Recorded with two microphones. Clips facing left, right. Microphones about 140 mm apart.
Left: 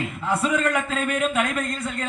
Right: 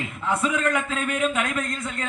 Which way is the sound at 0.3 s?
45° left (ahead or behind).